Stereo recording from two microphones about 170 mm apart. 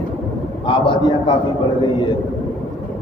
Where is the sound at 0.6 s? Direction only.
30° left (ahead or behind).